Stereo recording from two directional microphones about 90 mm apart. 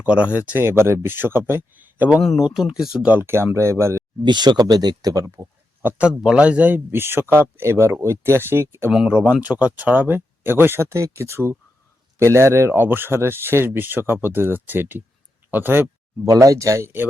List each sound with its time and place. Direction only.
0.0 s speech: 15° right (ahead or behind)
2.4 s speech: 10° right (ahead or behind)
3.1 s speech: 25° right (ahead or behind)
4.2 s speech: 55° right (ahead or behind)
6.0 s speech: 10° right (ahead or behind); by 8.9 s 30° right (ahead or behind)
9.0 s speech: 15° right (ahead or behind)
16.2 s speech: 40° right (ahead or behind)